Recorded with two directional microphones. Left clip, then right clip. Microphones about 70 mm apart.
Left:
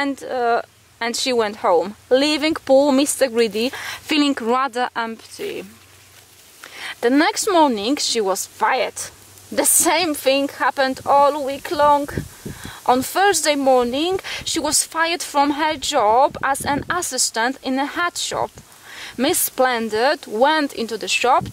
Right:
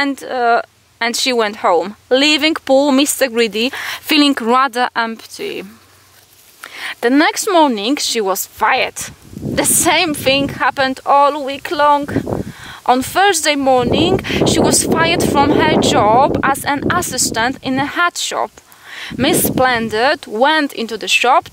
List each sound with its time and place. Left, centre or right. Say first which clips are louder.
0.0 s speech: right 5 dB; right
6.8 s speech: right 4 dB; right